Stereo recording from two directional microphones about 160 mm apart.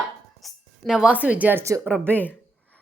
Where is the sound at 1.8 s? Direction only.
10° left (ahead or behind).